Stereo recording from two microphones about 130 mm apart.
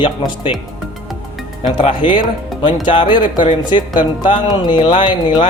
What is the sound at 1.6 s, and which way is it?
Speech, 35° left (ahead or behind).